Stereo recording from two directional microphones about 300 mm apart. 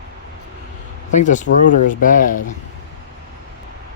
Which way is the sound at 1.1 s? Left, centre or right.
Left.